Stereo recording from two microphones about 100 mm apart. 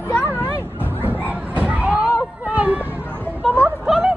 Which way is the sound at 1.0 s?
15° right (ahead or behind).